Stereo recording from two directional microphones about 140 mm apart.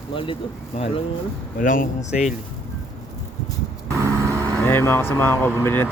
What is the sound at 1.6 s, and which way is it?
Speech, 70° left (ahead or behind).